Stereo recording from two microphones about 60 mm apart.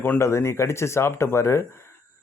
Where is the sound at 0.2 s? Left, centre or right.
Left.